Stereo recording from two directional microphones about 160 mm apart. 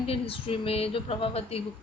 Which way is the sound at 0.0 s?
35° left (ahead or behind).